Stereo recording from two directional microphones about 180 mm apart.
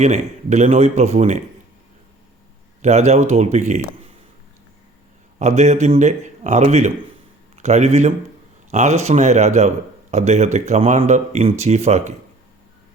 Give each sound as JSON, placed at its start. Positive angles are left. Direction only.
{"t": 0.0, "sound": "a man's voice", "side_deg": -40}
{"t": 2.8, "sound": "a man's voice", "side_deg": -40}
{"t": 5.4, "sound": "a man's voice", "side_deg": -40}